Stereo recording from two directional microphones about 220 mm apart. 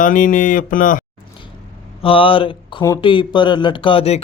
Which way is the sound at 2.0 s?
25° left (ahead or behind).